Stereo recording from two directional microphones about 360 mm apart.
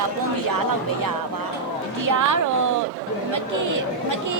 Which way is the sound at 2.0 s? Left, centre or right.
Right.